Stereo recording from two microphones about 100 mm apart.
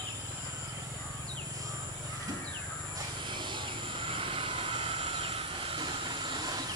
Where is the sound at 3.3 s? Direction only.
50° right (ahead or behind); by 5.8 s 70° right (ahead or behind).